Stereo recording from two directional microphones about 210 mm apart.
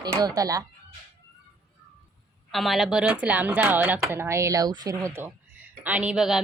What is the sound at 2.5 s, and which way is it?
Speech, centre (ahead or behind).